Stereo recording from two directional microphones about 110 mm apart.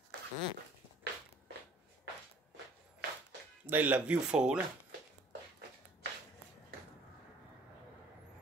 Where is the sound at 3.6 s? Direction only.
15° right (ahead or behind).